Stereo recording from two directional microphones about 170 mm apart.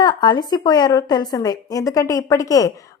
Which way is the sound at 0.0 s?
25° left (ahead or behind).